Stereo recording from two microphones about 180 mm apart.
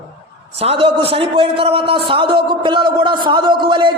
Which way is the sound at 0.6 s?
30° right (ahead or behind).